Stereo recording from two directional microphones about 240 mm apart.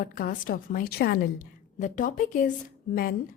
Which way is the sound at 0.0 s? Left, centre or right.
Left.